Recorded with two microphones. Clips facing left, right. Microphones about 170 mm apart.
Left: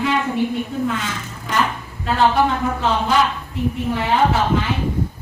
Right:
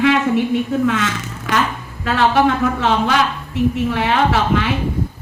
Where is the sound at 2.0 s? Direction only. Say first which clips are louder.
Right 2 dB; 80° right.